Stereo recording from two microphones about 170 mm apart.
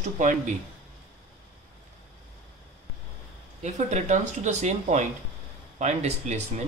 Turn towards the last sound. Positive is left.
turn(degrees=-45)  # may be behind; listen again after turning